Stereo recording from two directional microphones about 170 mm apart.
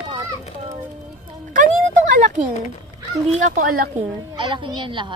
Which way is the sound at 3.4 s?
55° right (ahead or behind).